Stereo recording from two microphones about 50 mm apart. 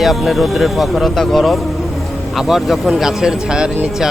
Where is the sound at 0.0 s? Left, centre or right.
Centre.